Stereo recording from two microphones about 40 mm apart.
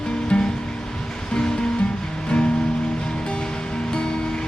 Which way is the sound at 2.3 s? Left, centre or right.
Left.